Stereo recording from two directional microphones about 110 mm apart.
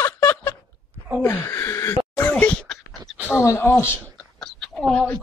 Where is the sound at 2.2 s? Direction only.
15° left (ahead or behind).